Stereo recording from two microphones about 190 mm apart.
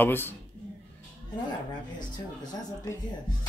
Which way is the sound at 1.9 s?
20° left (ahead or behind).